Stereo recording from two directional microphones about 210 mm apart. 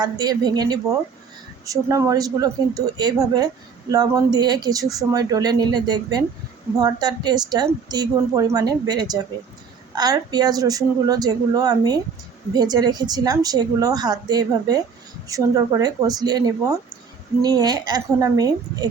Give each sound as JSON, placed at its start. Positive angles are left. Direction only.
{"t": 0.0, "sound": "a woman's voice", "side_deg": -20}